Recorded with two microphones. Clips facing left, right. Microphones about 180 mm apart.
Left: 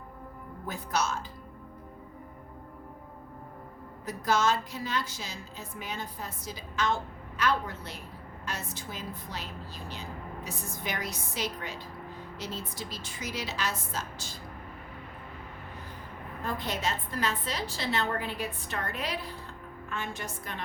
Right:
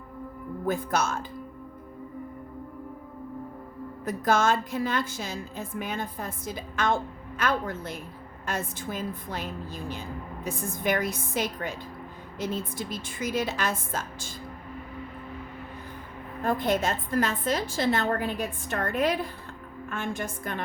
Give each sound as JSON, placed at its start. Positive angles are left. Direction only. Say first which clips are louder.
{"t": 0.6, "sound": "a woman's voice", "louder": "right 5 dB", "side_deg": -50}
{"t": 4.0, "sound": "a woman's voice", "louder": "right 3 dB", "side_deg": -50}
{"t": 16.4, "sound": "a woman's voice", "louder": "right 7 dB", "side_deg": -50}